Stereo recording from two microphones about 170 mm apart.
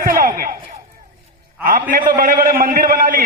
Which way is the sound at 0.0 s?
60° right (ahead or behind).